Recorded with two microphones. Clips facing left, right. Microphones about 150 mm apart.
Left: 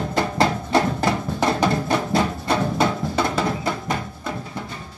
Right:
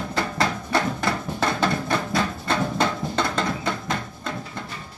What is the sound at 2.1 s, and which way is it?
Music, 15° left (ahead or behind).